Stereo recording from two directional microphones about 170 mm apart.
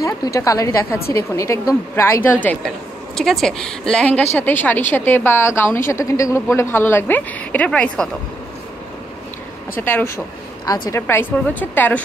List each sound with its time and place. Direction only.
0.0 s a woman's voice: 20° left (ahead or behind)
9.8 s a woman's voice: 15° left (ahead or behind)